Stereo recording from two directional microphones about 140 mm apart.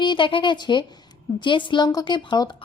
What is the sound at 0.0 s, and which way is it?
A woman's voice, 35° left (ahead or behind).